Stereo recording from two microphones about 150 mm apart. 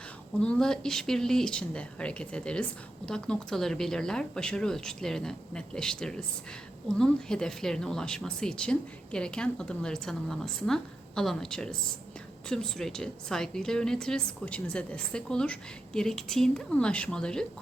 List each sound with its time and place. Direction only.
0.3 s speech: 5° left (ahead or behind)